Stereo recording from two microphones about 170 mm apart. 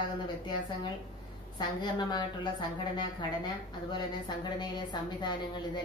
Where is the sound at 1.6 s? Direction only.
25° left (ahead or behind).